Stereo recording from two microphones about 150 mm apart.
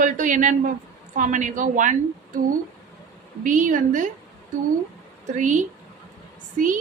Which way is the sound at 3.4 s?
60° right (ahead or behind).